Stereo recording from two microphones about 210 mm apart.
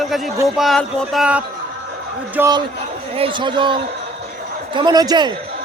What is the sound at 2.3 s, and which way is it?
A man's voice, 15° right (ahead or behind).